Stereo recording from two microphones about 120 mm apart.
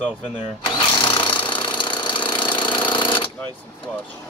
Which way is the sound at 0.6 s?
40° left (ahead or behind).